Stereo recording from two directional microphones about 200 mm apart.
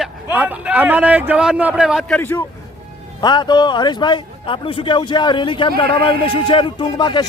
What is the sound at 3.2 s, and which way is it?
A man's voice, 20° left (ahead or behind).